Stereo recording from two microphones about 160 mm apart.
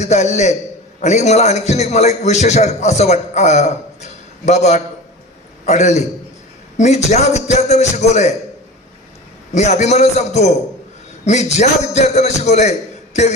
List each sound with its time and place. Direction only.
0.0 s a man's voice: 45° left (ahead or behind)
9.6 s a man's voice: 45° left (ahead or behind)